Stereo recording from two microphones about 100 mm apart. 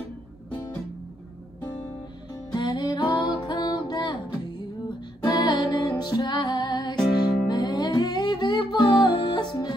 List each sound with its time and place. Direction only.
2.5 s music: 45° left (ahead or behind)
5.2 s music: 40° left (ahead or behind)